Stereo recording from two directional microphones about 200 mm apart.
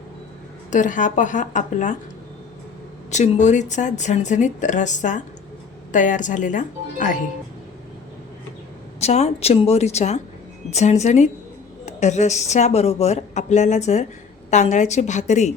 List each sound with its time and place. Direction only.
0.7 s speech: 40° left (ahead or behind)
3.1 s speech: 35° left (ahead or behind)
9.0 s speech: 30° left (ahead or behind)